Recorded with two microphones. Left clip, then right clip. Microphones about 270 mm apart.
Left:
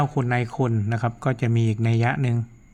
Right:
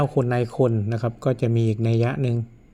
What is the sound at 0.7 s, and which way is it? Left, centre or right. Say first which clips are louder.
Speech: even; centre.